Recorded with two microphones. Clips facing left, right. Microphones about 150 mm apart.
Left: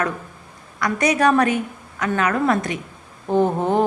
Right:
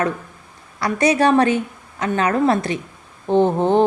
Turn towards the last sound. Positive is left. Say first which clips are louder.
# right 3 dB
turn(degrees=-30)  # may be behind; listen again after turning